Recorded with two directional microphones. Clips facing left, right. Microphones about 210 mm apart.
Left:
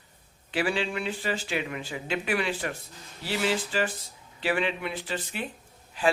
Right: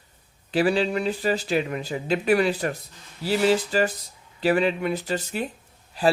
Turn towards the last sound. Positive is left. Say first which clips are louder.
# right 4 dB
turn(degrees=-40)  # may be behind; listen again after turning